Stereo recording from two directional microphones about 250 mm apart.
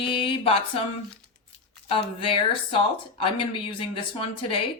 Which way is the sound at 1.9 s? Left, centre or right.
Left.